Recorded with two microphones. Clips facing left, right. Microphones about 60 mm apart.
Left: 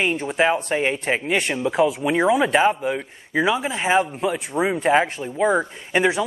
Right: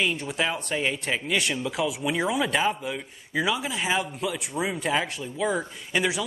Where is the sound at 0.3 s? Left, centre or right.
Left.